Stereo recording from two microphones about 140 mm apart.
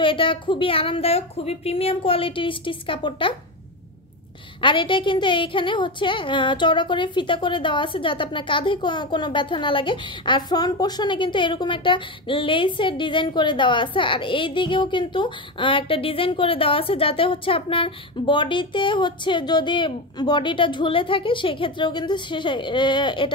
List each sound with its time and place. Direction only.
0.0 s a woman's voice: 40° left (ahead or behind)
4.6 s a woman's voice: 35° left (ahead or behind)